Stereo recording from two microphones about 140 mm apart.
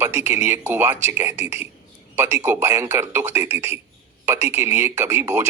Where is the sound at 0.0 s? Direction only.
15° right (ahead or behind).